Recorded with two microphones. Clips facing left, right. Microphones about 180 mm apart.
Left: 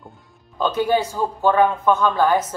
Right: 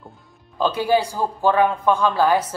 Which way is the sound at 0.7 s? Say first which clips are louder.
Even; 10° right (ahead or behind).